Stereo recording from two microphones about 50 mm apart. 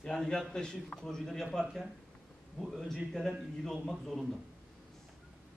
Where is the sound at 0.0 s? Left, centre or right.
Centre.